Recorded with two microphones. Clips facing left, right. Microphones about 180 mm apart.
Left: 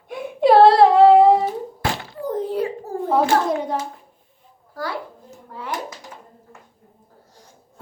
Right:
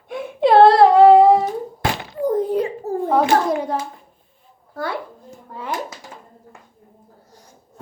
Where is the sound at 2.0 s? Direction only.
20° right (ahead or behind).